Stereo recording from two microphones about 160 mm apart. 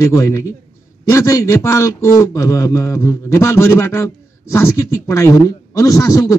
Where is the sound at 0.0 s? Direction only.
20° left (ahead or behind).